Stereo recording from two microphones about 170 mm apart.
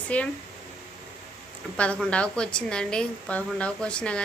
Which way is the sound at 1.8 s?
5° left (ahead or behind).